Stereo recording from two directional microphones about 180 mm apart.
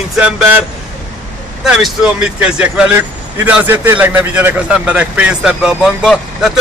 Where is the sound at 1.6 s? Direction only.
5° right (ahead or behind).